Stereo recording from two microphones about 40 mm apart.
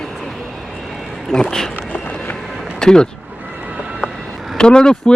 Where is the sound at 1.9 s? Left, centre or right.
Left.